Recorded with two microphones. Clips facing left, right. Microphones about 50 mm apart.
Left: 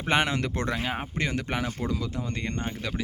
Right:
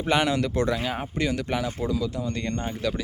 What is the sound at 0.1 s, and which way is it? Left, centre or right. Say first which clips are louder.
Speech: right 2 dB; left.